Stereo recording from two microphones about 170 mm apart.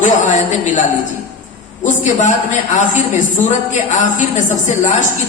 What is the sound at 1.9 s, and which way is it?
A man's voice, 50° left (ahead or behind).